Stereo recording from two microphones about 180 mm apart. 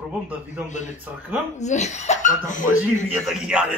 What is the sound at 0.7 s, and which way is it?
Speech, 40° left (ahead or behind).